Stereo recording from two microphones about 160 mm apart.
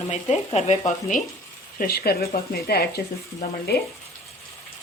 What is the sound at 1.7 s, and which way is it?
Speech, 70° left (ahead or behind).